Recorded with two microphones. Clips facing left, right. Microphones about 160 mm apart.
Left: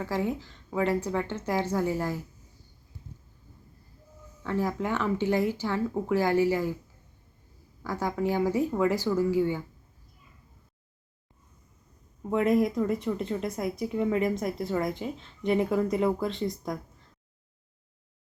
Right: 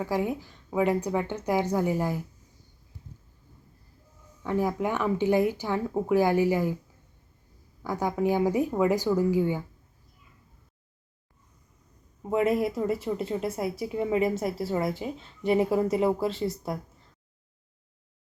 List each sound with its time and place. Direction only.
0.0 s speech: 15° right (ahead or behind)
4.4 s speech: 15° right (ahead or behind)
7.8 s speech: 15° right (ahead or behind)
12.3 s speech: 5° right (ahead or behind)
16.2 s speech: 5° right (ahead or behind)